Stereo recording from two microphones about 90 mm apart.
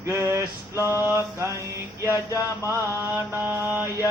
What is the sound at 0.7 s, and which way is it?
Mantra, 30° left (ahead or behind).